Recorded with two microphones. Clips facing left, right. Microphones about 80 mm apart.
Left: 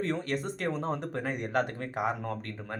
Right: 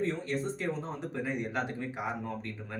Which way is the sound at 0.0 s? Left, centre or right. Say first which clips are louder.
Left 1 dB; left.